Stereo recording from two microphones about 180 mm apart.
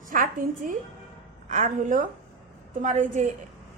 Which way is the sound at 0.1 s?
50° right (ahead or behind).